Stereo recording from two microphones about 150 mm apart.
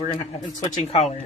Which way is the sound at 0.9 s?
45° left (ahead or behind).